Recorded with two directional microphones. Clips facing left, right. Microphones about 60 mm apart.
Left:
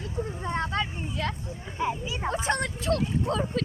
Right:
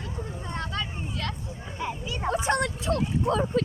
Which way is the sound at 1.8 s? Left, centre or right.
Centre.